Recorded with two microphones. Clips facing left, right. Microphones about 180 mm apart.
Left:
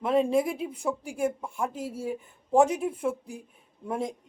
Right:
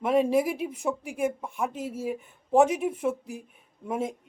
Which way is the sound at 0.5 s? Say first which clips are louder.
Right 1 dB; 30° left (ahead or behind).